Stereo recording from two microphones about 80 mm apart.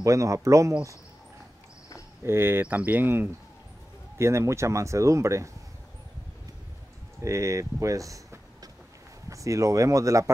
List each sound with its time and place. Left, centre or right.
0.0 s speech: right
2.2 s speech: right
4.2 s speech: right
7.2 s speech: right